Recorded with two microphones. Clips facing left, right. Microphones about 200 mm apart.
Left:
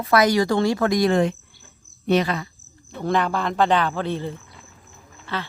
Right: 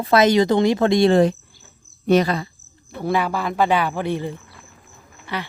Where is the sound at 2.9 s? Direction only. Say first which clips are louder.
Right 1 dB; 10° right (ahead or behind).